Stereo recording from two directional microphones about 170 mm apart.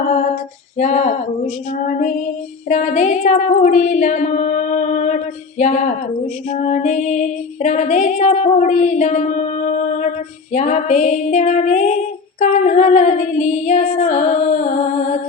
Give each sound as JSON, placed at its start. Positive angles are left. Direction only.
{"t": 0.8, "sound": "female singing", "side_deg": 45}
{"t": 10.5, "sound": "female singing", "side_deg": 45}